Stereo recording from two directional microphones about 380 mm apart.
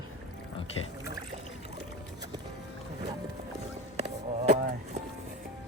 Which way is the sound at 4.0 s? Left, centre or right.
Centre.